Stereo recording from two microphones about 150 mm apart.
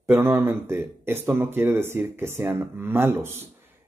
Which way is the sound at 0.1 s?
15° right (ahead or behind).